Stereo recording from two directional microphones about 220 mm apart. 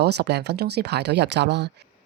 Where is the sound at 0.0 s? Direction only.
50° right (ahead or behind).